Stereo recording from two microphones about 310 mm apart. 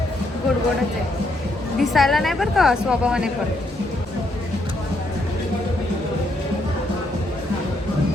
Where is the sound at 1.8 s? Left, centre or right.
Centre.